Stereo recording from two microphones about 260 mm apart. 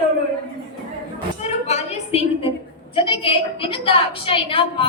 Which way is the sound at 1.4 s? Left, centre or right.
Left.